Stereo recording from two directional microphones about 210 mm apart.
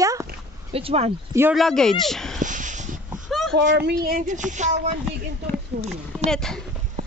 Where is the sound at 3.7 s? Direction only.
50° right (ahead or behind).